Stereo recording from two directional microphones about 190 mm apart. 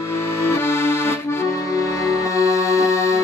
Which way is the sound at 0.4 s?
15° left (ahead or behind).